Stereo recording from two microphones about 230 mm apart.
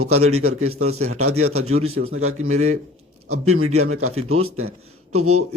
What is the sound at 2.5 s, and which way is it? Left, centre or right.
Speech, right.